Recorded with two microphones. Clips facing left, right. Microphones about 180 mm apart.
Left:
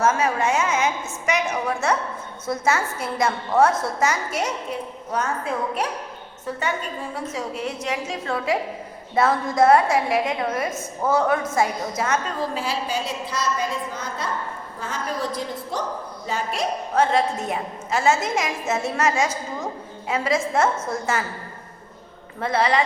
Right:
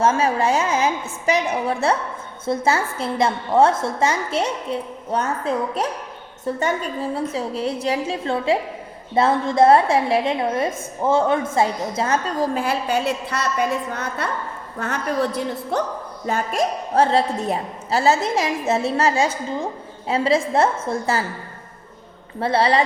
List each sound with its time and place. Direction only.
0.0 s a woman's voice: 30° right (ahead or behind)
7.1 s a woman's voice: 30° right (ahead or behind)
12.5 s a woman's voice: 60° right (ahead or behind)
16.2 s speech: 50° right (ahead or behind)
16.9 s a woman's voice: 35° right (ahead or behind)
22.4 s a woman's voice: 30° right (ahead or behind)